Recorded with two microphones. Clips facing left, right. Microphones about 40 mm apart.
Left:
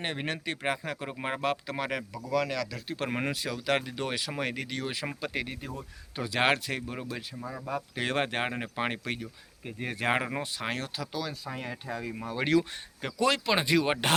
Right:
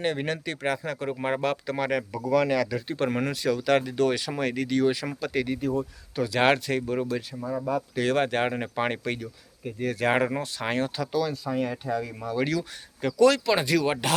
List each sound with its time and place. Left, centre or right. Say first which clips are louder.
0.0 s speech: right 5 dB; centre
2.3 s speech: right 6 dB; centre
3.1 s speech: right 1 dB; centre
3.4 s speech: right 10 dB; centre
7.7 s speech: right 5 dB; centre
9.6 s speech: right 6 dB; left
10.1 s speech: right 3 dB; centre
12.2 s speech: left 4 dB; left